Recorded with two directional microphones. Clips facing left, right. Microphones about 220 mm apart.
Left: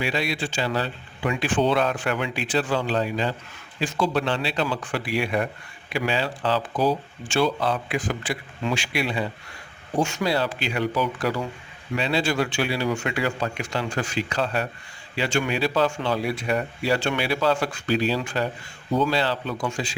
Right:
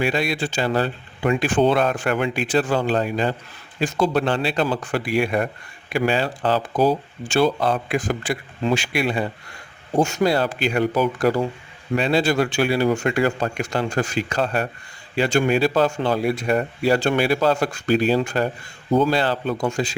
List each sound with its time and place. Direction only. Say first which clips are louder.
0.0 s speech: right 4 dB; 50° right (ahead or behind)